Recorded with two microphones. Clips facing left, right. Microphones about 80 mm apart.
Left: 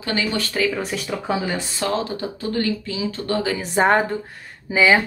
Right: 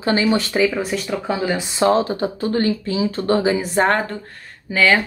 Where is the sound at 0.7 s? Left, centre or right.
Centre.